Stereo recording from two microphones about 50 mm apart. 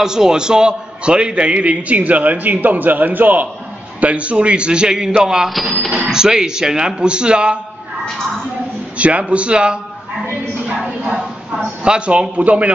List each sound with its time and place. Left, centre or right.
0.0 s a man's voice: centre; by 3.4 s right
4.0 s a man's voice: right
5.5 s speech: centre
5.9 s speech: centre
8.9 s a man's voice: right
11.1 s a man's voice: centre; by 12.7 s right